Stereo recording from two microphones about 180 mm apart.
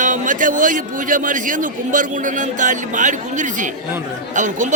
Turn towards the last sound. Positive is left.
turn(degrees=-45)  # may be behind; listen again after turning